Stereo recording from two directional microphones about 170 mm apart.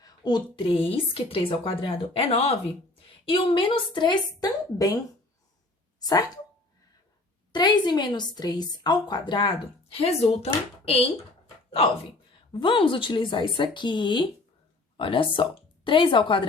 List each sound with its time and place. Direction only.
0.0 s a woman's voice: 25° left (ahead or behind)
6.0 s speech: 20° left (ahead or behind)
7.5 s a woman's voice: 25° left (ahead or behind)
12.5 s a woman's voice: 30° left (ahead or behind)